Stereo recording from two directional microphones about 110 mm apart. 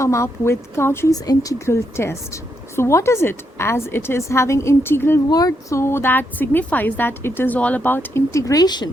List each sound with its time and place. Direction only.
0.0 s speech: 25° left (ahead or behind)
5.3 s speech: 35° left (ahead or behind)